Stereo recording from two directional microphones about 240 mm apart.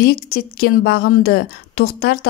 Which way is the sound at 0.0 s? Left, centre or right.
Left.